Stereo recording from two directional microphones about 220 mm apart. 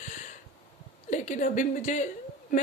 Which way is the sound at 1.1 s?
35° left (ahead or behind).